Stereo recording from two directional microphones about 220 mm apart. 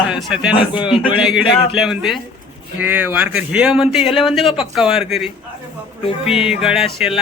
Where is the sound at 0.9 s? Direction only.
25° left (ahead or behind).